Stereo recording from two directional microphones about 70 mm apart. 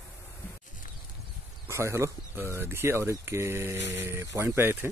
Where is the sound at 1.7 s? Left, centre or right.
Right.